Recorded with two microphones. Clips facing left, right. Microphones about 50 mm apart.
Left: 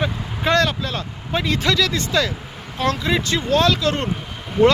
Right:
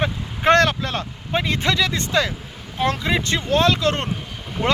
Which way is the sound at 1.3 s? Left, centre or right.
Right.